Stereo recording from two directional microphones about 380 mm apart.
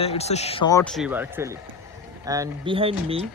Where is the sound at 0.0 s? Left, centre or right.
Centre.